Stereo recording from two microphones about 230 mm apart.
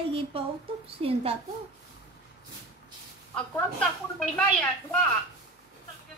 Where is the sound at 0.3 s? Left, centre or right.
Right.